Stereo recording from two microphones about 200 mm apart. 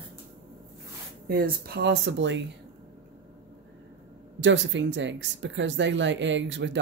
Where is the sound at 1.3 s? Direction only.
50° right (ahead or behind); by 2.4 s 65° right (ahead or behind).